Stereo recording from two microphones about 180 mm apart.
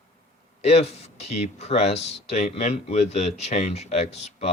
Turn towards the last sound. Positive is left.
turn(degrees=35)  # may be behind; listen again after turning